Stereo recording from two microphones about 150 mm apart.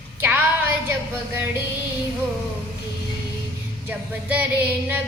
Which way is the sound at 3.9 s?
10° right (ahead or behind).